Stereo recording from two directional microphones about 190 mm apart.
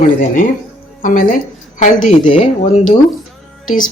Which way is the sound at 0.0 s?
45° left (ahead or behind).